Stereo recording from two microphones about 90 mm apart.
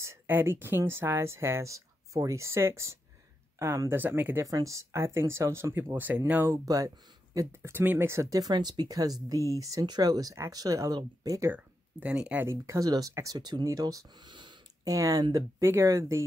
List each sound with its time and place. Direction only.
0.0 s speech: 25° right (ahead or behind)
3.9 s speech: 25° right (ahead or behind)
4.4 s speech: 40° right (ahead or behind)
5.9 s speech: 20° right (ahead or behind)
6.5 s speech: 40° right (ahead or behind)
11.5 s speech: 15° right (ahead or behind)
12.4 s speech: 35° right (ahead or behind); by 14.6 s 60° right (ahead or behind)
14.9 s speech: 40° right (ahead or behind)